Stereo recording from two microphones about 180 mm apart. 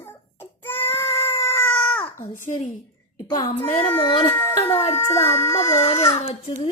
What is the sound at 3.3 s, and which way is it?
Speech, 20° left (ahead or behind).